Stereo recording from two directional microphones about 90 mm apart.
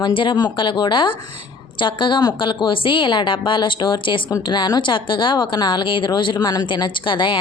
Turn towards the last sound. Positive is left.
turn(degrees=65)  # may be behind; listen again after turning